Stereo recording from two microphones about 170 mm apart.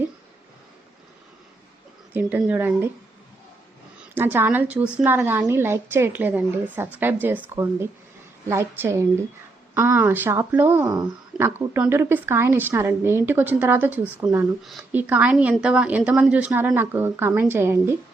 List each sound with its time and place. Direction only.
2.1 s a woman's voice: 10° right (ahead or behind)
4.1 s a woman's voice: 10° right (ahead or behind)